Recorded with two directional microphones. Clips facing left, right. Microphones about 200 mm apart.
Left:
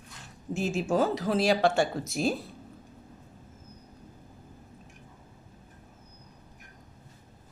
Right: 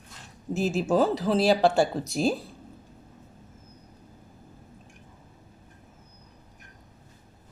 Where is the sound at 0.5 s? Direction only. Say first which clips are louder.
Right 3 dB; 35° right (ahead or behind).